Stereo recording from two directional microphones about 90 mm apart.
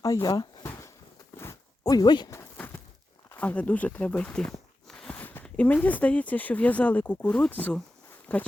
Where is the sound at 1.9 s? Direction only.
50° left (ahead or behind).